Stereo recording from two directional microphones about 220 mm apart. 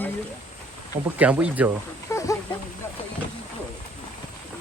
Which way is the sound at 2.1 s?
10° left (ahead or behind).